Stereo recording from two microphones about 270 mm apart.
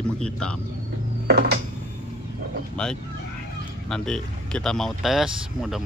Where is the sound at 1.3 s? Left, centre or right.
Right.